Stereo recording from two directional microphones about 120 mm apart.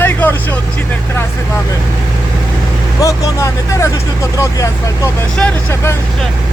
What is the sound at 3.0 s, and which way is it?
Speech, 25° left (ahead or behind).